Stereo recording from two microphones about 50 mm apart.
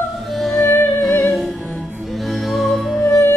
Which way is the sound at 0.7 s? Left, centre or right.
Left.